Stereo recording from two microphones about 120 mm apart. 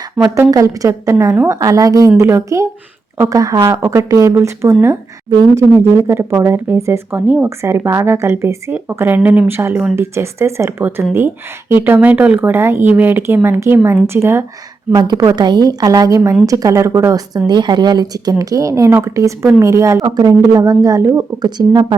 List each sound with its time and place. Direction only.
0.3 s speech: 30° right (ahead or behind)
5.3 s a woman's voice: 35° right (ahead or behind)
5.7 s speech: 20° right (ahead or behind)
14.9 s a woman's voice: 35° right (ahead or behind)
21.4 s a woman's voice: 35° right (ahead or behind)